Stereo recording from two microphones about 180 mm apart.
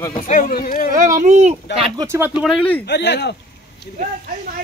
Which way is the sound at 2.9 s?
70° left (ahead or behind).